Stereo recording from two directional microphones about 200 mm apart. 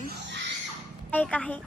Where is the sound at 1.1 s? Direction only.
5° left (ahead or behind).